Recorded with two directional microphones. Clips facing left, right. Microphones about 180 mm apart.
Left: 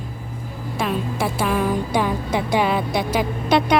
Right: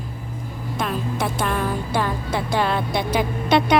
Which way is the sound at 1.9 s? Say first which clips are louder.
Left 2 dB; 15° left (ahead or behind).